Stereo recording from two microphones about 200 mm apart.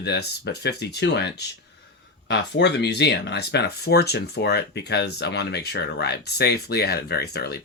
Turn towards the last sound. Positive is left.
turn(degrees=50)  # may be behind; listen again after turning